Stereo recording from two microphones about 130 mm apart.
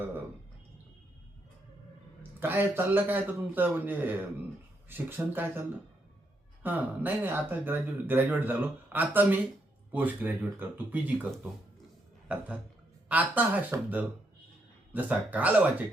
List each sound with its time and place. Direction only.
2.4 s speech: 15° right (ahead or behind)
13.1 s speech: 10° right (ahead or behind)